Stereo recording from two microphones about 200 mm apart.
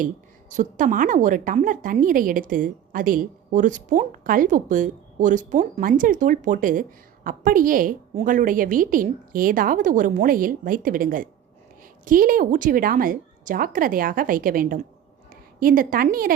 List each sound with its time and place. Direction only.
0.5 s a woman's voice: 40° right (ahead or behind)